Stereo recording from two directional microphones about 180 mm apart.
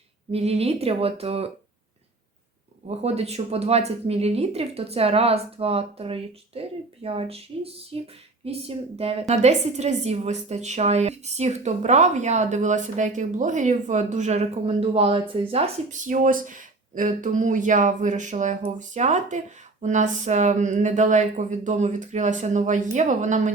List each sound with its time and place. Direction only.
0.3 s speech: 35° right (ahead or behind)
2.8 s speech: 35° right (ahead or behind)